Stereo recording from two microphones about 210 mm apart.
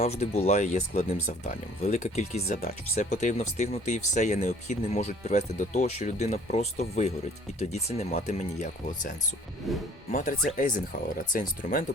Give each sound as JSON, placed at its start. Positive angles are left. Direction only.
{"t": 0.0, "sound": "speech", "side_deg": 30}
{"t": 9.6, "sound": "speech", "side_deg": 0}
{"t": 10.1, "sound": "speech", "side_deg": 40}